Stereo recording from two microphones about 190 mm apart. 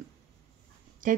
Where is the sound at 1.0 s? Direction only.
45° right (ahead or behind).